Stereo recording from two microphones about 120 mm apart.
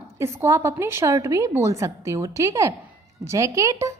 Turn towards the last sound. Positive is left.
turn(degrees=-25)  # may be behind; listen again after turning